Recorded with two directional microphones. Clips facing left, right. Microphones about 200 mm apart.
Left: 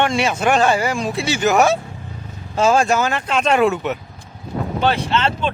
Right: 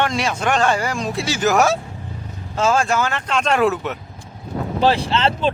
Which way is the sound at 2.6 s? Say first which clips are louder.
Left 3 dB; 15° left (ahead or behind).